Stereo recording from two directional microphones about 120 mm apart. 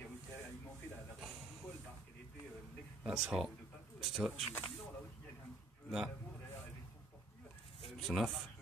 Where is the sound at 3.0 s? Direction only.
5° right (ahead or behind).